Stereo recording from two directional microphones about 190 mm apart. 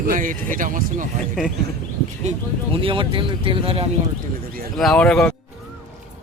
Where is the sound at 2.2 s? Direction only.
30° right (ahead or behind).